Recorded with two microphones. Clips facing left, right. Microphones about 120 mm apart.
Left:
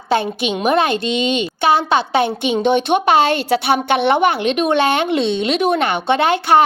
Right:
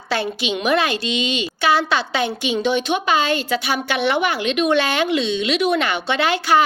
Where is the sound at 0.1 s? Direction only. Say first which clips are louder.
Left 4 dB; 50° left (ahead or behind).